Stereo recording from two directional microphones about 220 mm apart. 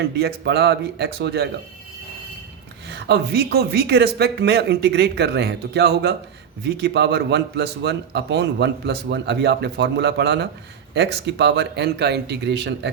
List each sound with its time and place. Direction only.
0.2 s a man's voice: 50° right (ahead or behind)
2.8 s a man's voice: 50° right (ahead or behind)